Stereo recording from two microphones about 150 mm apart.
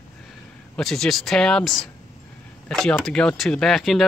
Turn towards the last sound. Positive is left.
turn(degrees=0)  # may be behind; listen again after turning